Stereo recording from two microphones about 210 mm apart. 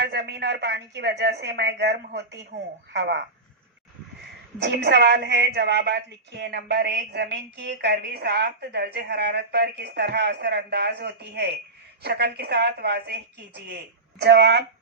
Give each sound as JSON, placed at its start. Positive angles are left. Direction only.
{"t": 0.0, "sound": "a woman's voice", "side_deg": -50}
{"t": 4.6, "sound": "a woman's voice", "side_deg": -55}
{"t": 14.2, "sound": "a woman's voice", "side_deg": -55}